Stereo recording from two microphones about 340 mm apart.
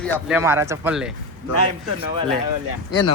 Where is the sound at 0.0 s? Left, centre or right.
Centre.